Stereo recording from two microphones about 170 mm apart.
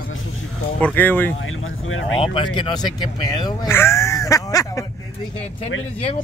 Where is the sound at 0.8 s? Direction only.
10° left (ahead or behind).